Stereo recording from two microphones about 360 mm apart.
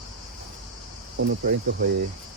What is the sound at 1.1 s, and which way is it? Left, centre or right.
Speech, right.